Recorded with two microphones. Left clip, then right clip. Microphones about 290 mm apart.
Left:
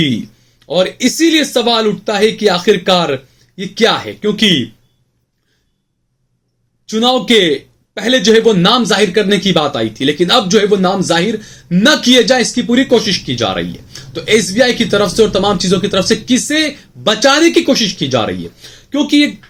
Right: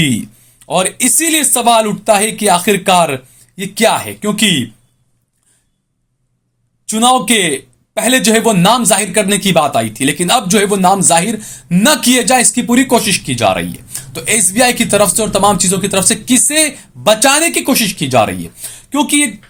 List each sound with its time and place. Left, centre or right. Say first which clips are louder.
0.7 s a man's voice: left 1 dB; right
6.8 s a man's voice: right 2 dB; right